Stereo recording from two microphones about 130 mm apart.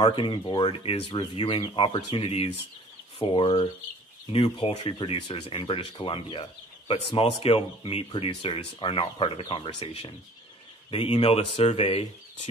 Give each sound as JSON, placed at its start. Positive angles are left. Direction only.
{"t": 0.0, "sound": "speech", "side_deg": 40}